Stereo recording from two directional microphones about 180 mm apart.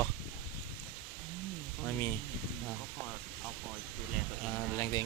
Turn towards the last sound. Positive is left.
turn(degrees=20)  # may be behind; listen again after turning